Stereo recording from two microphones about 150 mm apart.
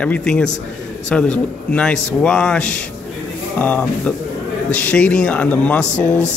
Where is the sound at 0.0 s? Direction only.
5° left (ahead or behind).